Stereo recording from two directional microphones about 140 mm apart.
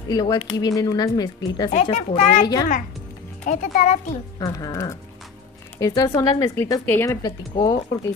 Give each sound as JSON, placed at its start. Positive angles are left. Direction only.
{"t": 0.1, "sound": "a woman's voice", "side_deg": 30}
{"t": 1.7, "sound": "a child's voice", "side_deg": 55}
{"t": 3.4, "sound": "a child's voice", "side_deg": 60}
{"t": 4.4, "sound": "a woman's voice", "side_deg": 25}